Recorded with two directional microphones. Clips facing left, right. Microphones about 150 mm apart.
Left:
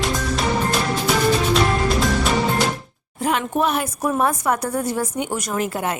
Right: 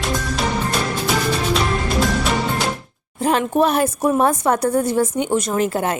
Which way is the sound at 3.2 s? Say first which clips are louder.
Right 4 dB; 35° right (ahead or behind).